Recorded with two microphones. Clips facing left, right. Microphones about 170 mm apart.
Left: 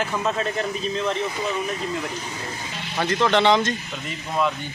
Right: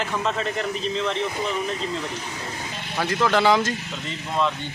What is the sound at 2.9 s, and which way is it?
Speech, 5° right (ahead or behind).